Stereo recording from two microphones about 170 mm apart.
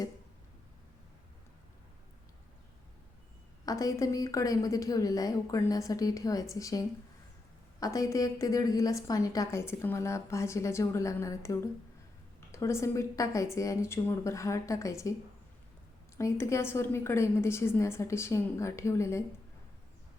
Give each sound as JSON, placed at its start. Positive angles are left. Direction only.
{"t": 3.7, "sound": "a woman's voice", "side_deg": 20}
{"t": 16.1, "sound": "a woman's voice", "side_deg": 15}